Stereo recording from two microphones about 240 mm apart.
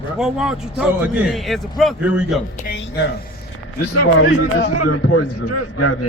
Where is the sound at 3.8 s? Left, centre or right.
Left.